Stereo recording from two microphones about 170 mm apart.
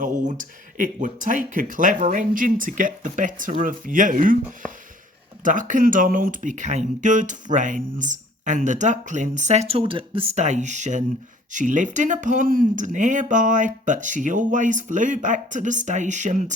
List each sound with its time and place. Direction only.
0.0 s speech: 50° right (ahead or behind)